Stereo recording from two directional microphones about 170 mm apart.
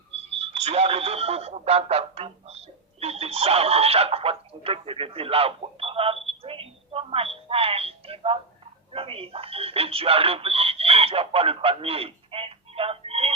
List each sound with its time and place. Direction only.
0.3 s speech: 35° right (ahead or behind)
6.4 s telephone: 35° right (ahead or behind)
8.9 s speech: 35° right (ahead or behind)